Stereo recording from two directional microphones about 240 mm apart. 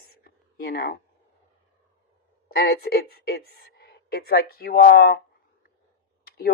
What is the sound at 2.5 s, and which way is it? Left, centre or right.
Speech, left.